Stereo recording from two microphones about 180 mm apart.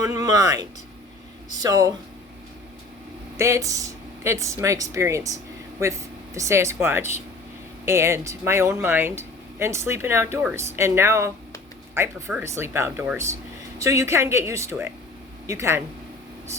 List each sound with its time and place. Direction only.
0.0 s speech: 20° right (ahead or behind)
3.3 s speech: 15° right (ahead or behind)